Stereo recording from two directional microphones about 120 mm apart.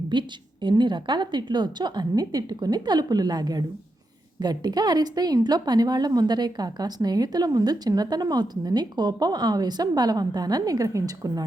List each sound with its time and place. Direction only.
0.1 s a woman's voice: 40° right (ahead or behind)